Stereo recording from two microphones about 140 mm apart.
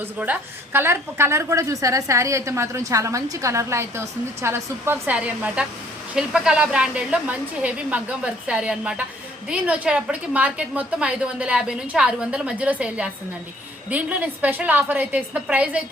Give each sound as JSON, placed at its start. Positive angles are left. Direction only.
{"t": 0.0, "sound": "a woman's voice", "side_deg": -15}